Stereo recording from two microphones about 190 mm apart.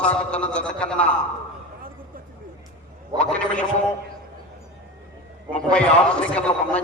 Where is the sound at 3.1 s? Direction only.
5° left (ahead or behind).